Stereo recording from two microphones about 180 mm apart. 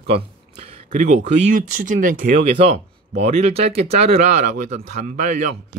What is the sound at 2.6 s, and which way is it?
Speech, 35° right (ahead or behind).